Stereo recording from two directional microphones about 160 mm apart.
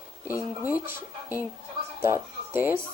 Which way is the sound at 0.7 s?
10° right (ahead or behind).